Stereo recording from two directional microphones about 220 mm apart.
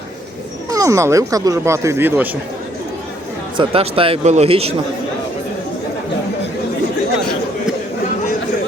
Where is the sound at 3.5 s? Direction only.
25° right (ahead or behind).